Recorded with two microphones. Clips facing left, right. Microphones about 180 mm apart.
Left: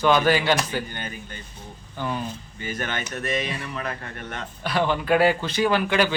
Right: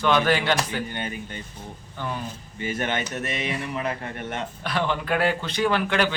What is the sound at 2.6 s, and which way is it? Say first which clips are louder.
Speech: right 3 dB; 25° right (ahead or behind).